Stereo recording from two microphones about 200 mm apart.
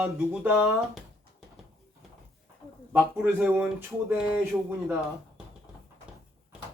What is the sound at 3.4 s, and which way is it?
Speech, 10° right (ahead or behind).